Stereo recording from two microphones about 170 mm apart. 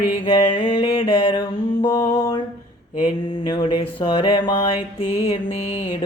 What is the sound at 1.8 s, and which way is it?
Music, 25° left (ahead or behind).